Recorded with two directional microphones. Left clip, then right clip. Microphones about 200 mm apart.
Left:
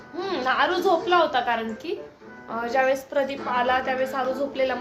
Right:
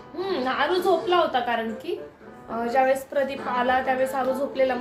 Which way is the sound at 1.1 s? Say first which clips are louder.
Left 1 dB; 20° left (ahead or behind).